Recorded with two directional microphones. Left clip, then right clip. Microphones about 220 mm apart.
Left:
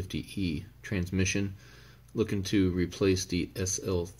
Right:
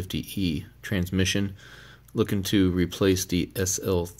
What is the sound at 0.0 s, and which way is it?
Speech, 30° right (ahead or behind).